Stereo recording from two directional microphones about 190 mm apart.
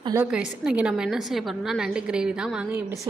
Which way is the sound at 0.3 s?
5° right (ahead or behind).